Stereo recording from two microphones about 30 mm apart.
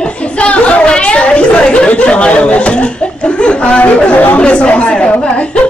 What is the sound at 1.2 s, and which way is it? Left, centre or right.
Speech, left.